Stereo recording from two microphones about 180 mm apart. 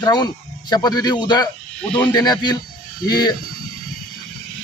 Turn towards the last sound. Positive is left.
turn(degrees=20)  # may be behind; listen again after turning